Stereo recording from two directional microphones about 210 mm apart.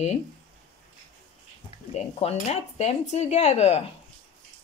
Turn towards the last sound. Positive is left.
turn(degrees=30)  # may be behind; listen again after turning